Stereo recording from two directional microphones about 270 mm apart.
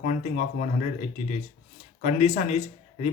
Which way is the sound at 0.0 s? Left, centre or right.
Left.